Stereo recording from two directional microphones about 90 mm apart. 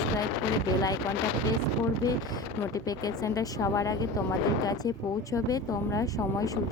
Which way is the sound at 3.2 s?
35° left (ahead or behind).